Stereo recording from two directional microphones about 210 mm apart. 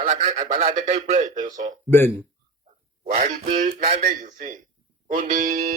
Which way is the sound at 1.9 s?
10° left (ahead or behind).